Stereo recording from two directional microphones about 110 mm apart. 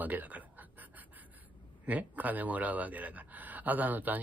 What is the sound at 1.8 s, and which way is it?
A man's voice, 15° right (ahead or behind).